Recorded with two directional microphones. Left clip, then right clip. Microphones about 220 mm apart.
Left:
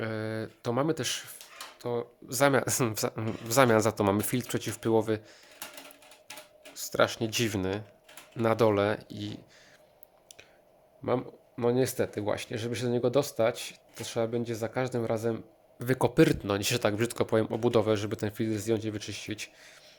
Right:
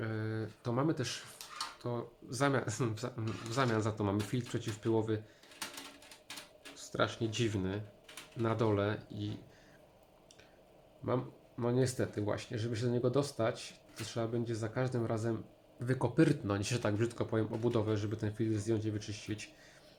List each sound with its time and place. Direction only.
0.0 s a sound: 50° left (ahead or behind)
1.8 s speech: 35° left (ahead or behind)
6.7 s speech: 50° left (ahead or behind)
11.0 s speech: 40° left (ahead or behind)